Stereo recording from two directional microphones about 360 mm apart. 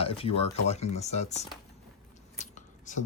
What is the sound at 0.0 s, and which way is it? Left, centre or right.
Speech, centre.